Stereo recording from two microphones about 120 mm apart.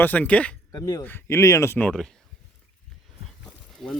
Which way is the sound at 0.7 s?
30° left (ahead or behind).